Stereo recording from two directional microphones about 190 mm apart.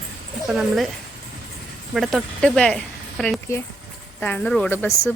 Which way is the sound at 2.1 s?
5° left (ahead or behind).